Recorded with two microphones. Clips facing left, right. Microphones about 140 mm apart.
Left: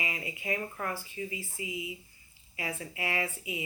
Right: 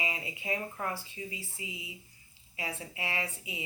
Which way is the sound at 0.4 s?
15° right (ahead or behind).